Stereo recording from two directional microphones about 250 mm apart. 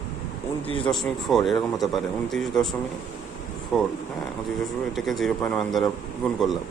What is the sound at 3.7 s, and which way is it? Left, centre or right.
Speech, centre.